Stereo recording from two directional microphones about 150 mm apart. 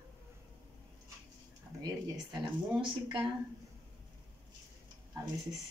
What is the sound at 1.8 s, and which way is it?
Speech, 30° right (ahead or behind).